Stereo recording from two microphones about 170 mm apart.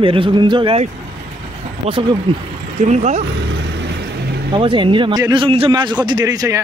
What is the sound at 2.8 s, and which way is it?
Speech, 45° right (ahead or behind).